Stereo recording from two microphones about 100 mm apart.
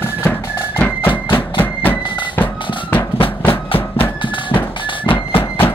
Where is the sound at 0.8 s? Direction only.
20° left (ahead or behind).